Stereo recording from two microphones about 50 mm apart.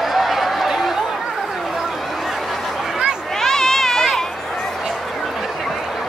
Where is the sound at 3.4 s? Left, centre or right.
Centre.